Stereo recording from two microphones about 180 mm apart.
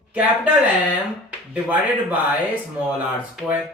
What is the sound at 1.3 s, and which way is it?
Speech, 10° right (ahead or behind).